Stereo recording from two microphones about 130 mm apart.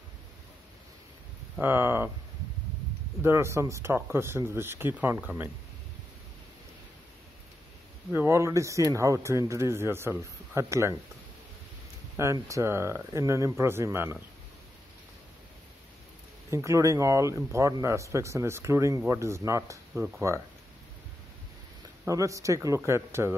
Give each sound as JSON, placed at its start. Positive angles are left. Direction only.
{"t": 1.6, "sound": "speech", "side_deg": -15}
{"t": 3.2, "sound": "speech", "side_deg": -20}
{"t": 8.1, "sound": "speech", "side_deg": -20}
{"t": 12.2, "sound": "speech", "side_deg": -20}
{"t": 16.4, "sound": "speech", "side_deg": -25}
{"t": 22.0, "sound": "speech", "side_deg": -25}